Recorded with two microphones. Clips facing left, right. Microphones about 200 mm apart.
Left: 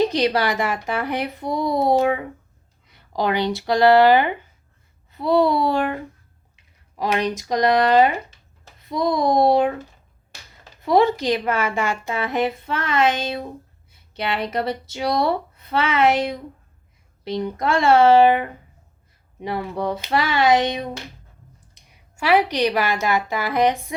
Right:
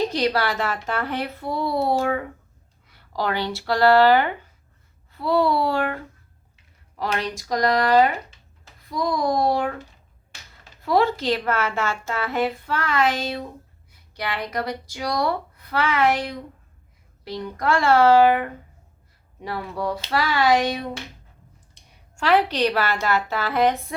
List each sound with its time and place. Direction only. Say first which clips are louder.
0.1 s a woman's voice: left 2 dB; 20° left (ahead or behind)
10.8 s a woman's voice: left 3 dB; 20° left (ahead or behind)
22.1 s a woman's voice: left 1 dB; 10° left (ahead or behind)